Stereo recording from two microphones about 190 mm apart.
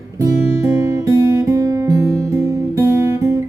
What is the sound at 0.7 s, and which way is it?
Guitar, 15° right (ahead or behind).